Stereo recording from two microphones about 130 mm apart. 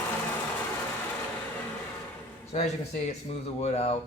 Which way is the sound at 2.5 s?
55° left (ahead or behind).